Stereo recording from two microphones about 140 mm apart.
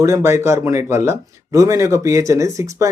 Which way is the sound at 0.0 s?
20° right (ahead or behind).